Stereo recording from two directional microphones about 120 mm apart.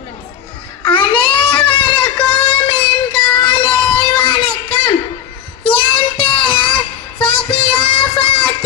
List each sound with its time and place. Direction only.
0.9 s child singing: 45° left (ahead or behind)